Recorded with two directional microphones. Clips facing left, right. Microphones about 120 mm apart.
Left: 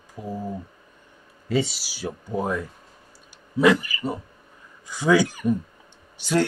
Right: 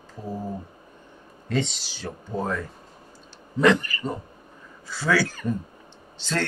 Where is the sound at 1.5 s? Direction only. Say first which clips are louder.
Left 2 dB; 5° left (ahead or behind).